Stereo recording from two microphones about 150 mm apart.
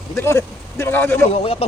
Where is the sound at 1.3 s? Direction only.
40° left (ahead or behind).